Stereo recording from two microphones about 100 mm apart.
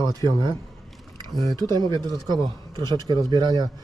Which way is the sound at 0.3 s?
50° right (ahead or behind).